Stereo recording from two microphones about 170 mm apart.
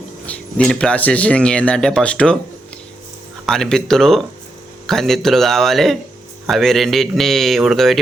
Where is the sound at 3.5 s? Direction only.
Centre (ahead or behind).